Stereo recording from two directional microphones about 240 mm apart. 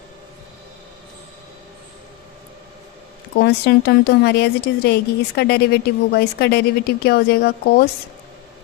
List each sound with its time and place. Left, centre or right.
3.3 s a woman's voice: left